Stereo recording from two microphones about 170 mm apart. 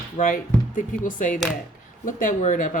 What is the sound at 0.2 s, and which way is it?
Speech, 45° left (ahead or behind).